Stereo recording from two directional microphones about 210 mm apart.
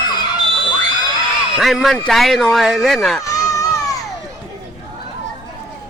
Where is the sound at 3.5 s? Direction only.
15° left (ahead or behind).